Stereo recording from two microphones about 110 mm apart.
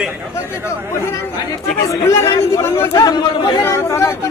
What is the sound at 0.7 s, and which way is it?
Speech, 25° left (ahead or behind).